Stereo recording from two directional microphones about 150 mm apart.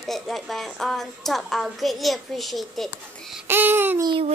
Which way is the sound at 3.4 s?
15° right (ahead or behind).